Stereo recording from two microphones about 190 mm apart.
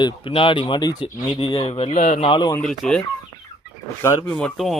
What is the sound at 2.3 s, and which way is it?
Speech, 25° left (ahead or behind).